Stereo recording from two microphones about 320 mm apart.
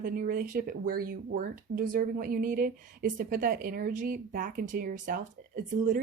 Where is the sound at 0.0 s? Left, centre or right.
Right.